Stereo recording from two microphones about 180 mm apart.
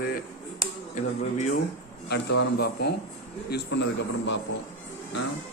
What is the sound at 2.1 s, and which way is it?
A man's voice, 70° left (ahead or behind).